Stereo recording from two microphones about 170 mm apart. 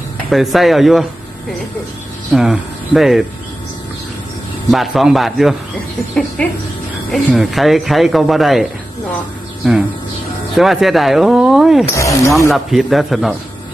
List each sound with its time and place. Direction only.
0.3 s speech: centre (ahead or behind)
2.3 s speech: centre (ahead or behind)
4.7 s speech: centre (ahead or behind)
9.6 s speech: centre (ahead or behind)
11.9 s speech: 15° left (ahead or behind)
12.5 s speech: centre (ahead or behind)